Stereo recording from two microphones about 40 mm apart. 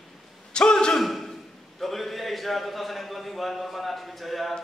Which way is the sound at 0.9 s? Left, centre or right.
Centre.